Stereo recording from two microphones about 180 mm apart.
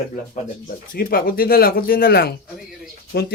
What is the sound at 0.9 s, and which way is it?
Speech, 55° left (ahead or behind).